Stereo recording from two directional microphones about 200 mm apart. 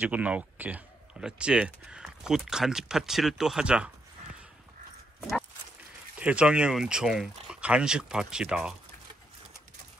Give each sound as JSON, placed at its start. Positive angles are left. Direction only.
{"t": 0.0, "sound": "speech", "side_deg": -5}
{"t": 6.1, "sound": "speech", "side_deg": -5}